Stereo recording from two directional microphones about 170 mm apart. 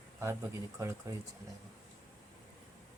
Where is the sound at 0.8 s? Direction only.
15° right (ahead or behind).